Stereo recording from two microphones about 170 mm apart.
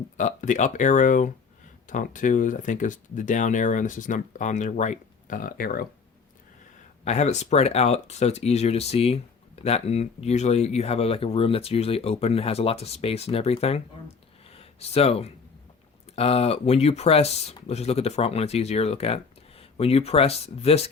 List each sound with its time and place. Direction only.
0.2 s speech: 45° left (ahead or behind)
7.0 s speech: 40° left (ahead or behind)
14.4 s a sound: 35° left (ahead or behind)
16.1 s speech: 35° left (ahead or behind)